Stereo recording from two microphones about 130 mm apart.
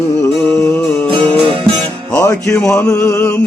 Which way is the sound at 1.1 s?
45° right (ahead or behind).